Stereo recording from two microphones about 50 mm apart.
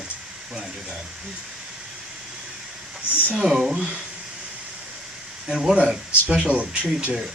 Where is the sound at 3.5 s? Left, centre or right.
Centre.